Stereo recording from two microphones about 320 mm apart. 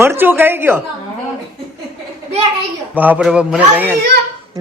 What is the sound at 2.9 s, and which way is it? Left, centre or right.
Speech, centre.